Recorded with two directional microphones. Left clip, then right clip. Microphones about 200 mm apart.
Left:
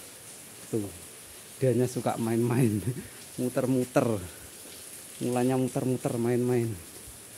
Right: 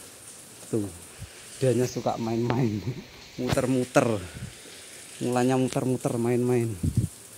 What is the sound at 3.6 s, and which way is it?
Speech, centre (ahead or behind).